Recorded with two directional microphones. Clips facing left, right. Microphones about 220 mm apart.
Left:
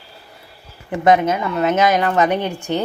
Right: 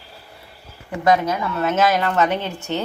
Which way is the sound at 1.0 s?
20° left (ahead or behind).